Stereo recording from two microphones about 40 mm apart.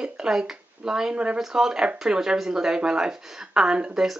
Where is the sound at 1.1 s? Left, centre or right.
Right.